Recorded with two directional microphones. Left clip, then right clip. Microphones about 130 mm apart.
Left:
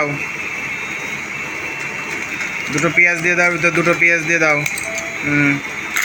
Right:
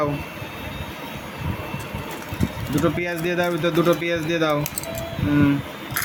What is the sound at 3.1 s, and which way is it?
Speech, 5° right (ahead or behind).